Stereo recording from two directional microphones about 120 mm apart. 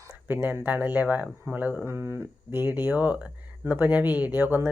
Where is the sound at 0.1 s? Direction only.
20° right (ahead or behind).